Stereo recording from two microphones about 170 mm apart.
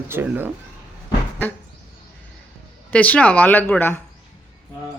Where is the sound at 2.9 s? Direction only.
10° left (ahead or behind).